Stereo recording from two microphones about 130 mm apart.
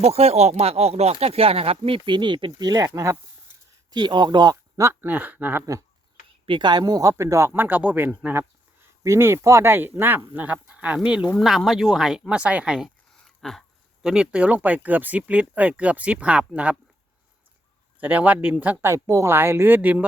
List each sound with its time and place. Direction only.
0.0 s speech: 50° right (ahead or behind); by 3.2 s 25° right (ahead or behind)
3.9 s speech: 35° right (ahead or behind)
4.8 s speech: 15° right (ahead or behind)
6.4 s speech: 35° right (ahead or behind); by 16.7 s 10° right (ahead or behind)
18.0 s speech: 10° right (ahead or behind)